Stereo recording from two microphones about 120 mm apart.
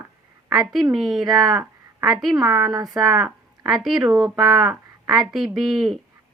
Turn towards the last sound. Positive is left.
turn(degrees=-5)  # may be behind; listen again after turning